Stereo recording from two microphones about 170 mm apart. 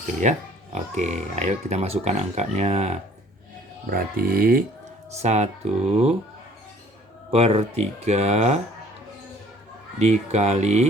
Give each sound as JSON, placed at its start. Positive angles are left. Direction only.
{"t": 0.2, "sound": "speech", "side_deg": -45}
{"t": 3.8, "sound": "speech", "side_deg": -60}
{"t": 5.1, "sound": "speech", "side_deg": -40}
{"t": 7.3, "sound": "speech", "side_deg": -35}
{"t": 10.0, "sound": "speech", "side_deg": -40}